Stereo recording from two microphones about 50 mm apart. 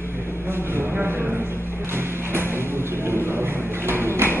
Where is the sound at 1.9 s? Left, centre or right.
Right.